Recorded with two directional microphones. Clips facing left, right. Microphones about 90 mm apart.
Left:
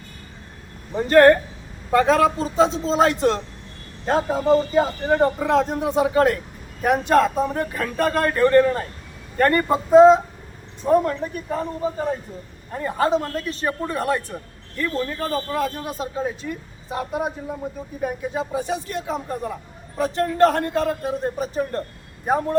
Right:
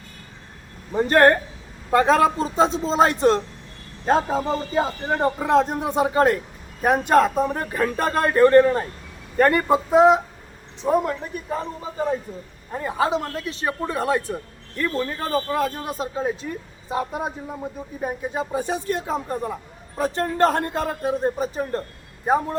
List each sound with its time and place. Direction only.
0.9 s a man's voice: 25° right (ahead or behind)
5.0 s a man's voice: 10° right (ahead or behind)
5.5 s a man's voice: 20° right (ahead or behind)
9.4 s a man's voice: 10° right (ahead or behind)
14.8 s a man's voice: 30° right (ahead or behind)
17.1 s a man's voice: 10° left (ahead or behind)
18.0 s a man's voice: 35° right (ahead or behind)
22.3 s a man's voice: 15° right (ahead or behind)